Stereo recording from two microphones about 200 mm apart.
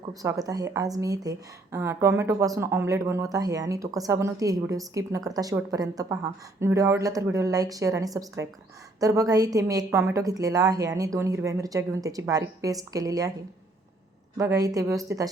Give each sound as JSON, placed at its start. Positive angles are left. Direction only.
{"t": 0.0, "sound": "a woman's voice", "side_deg": -15}
{"t": 14.3, "sound": "a woman's voice", "side_deg": -15}